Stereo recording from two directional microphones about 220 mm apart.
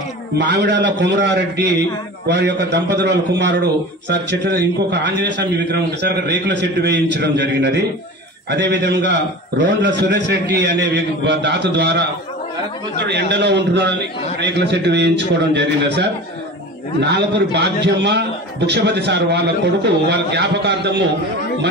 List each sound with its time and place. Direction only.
0.4 s a man's voice: 50° right (ahead or behind)
13.0 s a man's voice: 50° right (ahead or behind)